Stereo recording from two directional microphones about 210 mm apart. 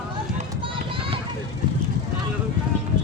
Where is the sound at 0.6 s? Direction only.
25° right (ahead or behind).